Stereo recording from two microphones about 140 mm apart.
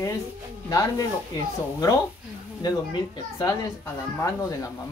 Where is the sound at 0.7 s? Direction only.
25° left (ahead or behind).